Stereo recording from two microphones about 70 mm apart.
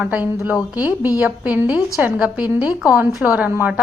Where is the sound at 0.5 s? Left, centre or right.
Right.